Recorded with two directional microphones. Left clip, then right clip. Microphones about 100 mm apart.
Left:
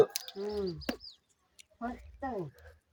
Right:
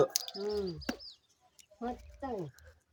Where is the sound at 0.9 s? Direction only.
Centre (ahead or behind).